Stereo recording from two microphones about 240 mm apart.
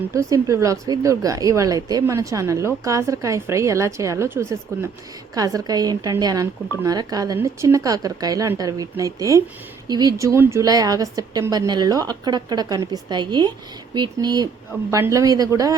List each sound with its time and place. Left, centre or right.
0.1 s speech: centre